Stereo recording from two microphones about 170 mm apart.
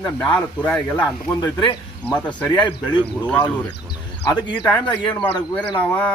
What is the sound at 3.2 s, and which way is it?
Speech, 10° left (ahead or behind).